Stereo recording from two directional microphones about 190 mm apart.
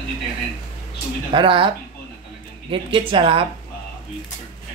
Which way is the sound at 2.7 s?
25° right (ahead or behind).